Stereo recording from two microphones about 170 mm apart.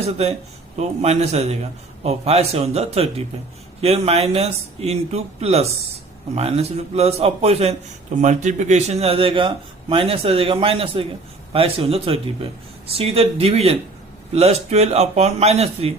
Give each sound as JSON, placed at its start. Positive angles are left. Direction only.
{"t": 0.8, "sound": "speech", "side_deg": -40}